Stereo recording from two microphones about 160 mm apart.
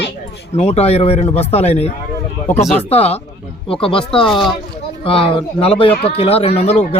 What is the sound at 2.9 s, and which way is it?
A man's voice, 40° left (ahead or behind).